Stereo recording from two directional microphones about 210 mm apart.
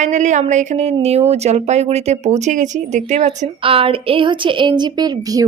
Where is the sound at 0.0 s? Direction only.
35° right (ahead or behind).